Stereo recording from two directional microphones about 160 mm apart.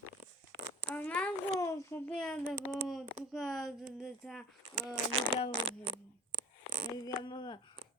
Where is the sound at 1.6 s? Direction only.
20° left (ahead or behind).